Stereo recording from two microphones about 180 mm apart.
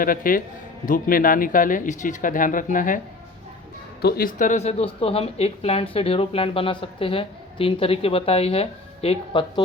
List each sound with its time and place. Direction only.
0.0 s speech: 50° left (ahead or behind)
4.0 s speech: 55° left (ahead or behind); by 9.6 s 30° left (ahead or behind)